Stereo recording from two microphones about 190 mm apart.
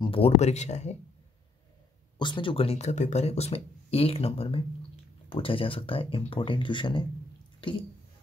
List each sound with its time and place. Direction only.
0.0 s speech: 30° left (ahead or behind)
2.1 s speech: 25° left (ahead or behind)